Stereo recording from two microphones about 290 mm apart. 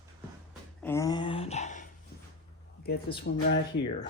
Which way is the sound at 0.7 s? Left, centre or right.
Centre.